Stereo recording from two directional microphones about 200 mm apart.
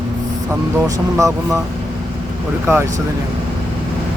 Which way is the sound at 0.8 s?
15° right (ahead or behind).